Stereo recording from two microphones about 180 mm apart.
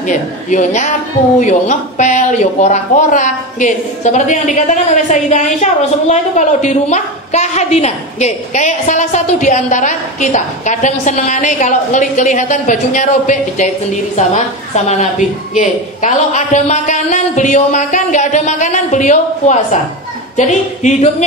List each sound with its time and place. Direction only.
0.0 s a man's voice: 45° left (ahead or behind)
14.9 s a man's voice: 40° left (ahead or behind)